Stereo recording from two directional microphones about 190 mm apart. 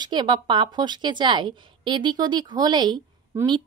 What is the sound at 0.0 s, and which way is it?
A woman's voice, 20° right (ahead or behind).